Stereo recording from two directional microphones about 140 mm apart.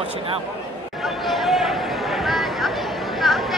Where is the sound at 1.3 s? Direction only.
Centre (ahead or behind).